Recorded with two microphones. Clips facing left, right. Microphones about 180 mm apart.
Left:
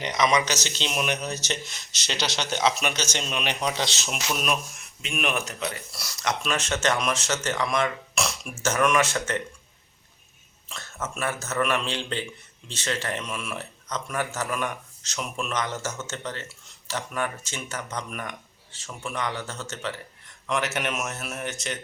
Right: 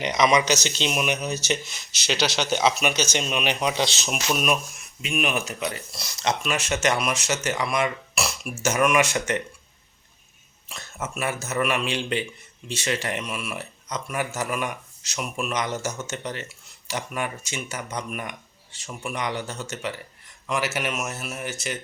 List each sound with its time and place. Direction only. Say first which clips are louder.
0.0 s speech: right 3 dB; 10° right (ahead or behind)
5.9 s speech: right 3 dB; 20° right (ahead or behind)
6.4 s speech: even; 10° right (ahead or behind)
10.7 s speech: right 1 dB; 15° right (ahead or behind)